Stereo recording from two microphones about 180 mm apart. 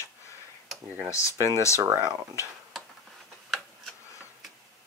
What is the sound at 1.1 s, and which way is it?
Speech, 15° left (ahead or behind).